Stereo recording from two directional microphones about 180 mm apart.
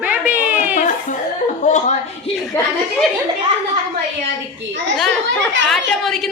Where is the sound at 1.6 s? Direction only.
40° left (ahead or behind).